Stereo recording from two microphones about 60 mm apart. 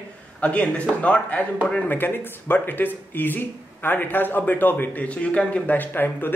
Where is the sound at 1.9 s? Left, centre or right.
Left.